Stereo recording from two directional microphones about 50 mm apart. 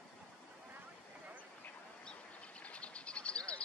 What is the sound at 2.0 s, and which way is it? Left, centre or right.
Bird, centre.